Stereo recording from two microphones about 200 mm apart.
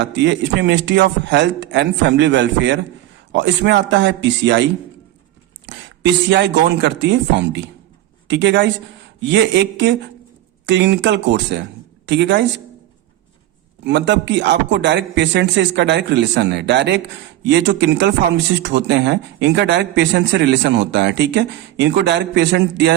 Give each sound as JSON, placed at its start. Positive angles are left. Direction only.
{"t": 0.0, "sound": "speech", "side_deg": -60}
{"t": 5.6, "sound": "speech", "side_deg": -60}
{"t": 13.8, "sound": "speech", "side_deg": -60}